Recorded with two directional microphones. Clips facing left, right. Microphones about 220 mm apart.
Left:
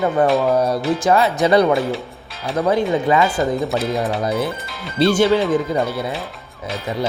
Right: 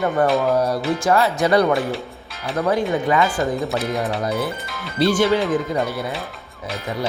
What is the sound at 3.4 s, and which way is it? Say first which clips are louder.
Speech: left 2 dB; centre (ahead or behind).